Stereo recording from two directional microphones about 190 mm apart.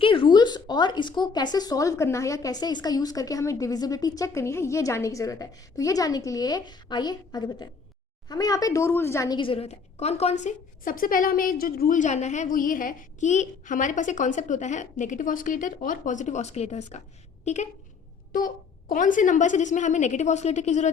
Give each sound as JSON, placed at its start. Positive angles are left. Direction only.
{"t": 0.0, "sound": "speech", "side_deg": 30}
{"t": 10.4, "sound": "a woman's voice", "side_deg": 45}
{"t": 18.3, "sound": "a woman's voice", "side_deg": 45}